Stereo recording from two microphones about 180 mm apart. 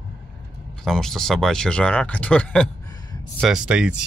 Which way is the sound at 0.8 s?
Centre (ahead or behind).